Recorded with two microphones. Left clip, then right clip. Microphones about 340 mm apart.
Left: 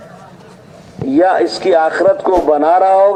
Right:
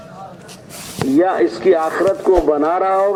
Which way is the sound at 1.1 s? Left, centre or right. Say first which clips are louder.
Left 4 dB; left.